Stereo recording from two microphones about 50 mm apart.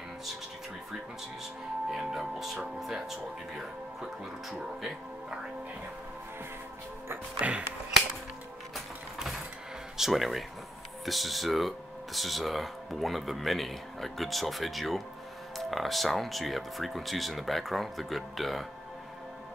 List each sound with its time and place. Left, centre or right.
1.9 s speech: centre
7.3 s a sound: right
9.9 s speech: centre